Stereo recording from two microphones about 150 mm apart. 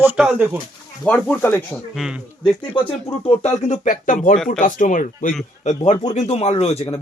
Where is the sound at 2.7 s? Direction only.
35° left (ahead or behind).